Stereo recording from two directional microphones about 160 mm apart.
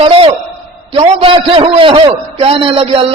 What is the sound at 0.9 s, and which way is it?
A man's voice, 35° right (ahead or behind).